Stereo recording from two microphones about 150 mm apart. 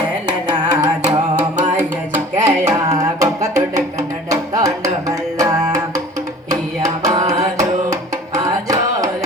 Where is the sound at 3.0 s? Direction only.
25° right (ahead or behind).